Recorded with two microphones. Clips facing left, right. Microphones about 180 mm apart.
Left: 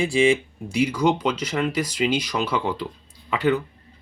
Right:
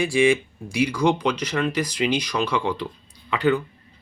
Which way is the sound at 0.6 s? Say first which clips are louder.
Even; 20° left (ahead or behind).